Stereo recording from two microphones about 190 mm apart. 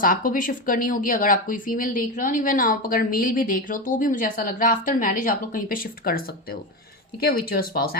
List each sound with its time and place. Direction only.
0.0 s speech: 45° left (ahead or behind)